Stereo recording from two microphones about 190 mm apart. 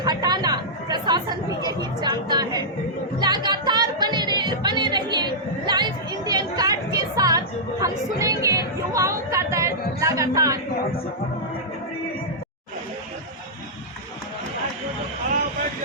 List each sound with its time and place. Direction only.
0.0 s chatter: 20° right (ahead or behind)
3.2 s music: 20° right (ahead or behind)
10.0 s speech: 15° right (ahead or behind)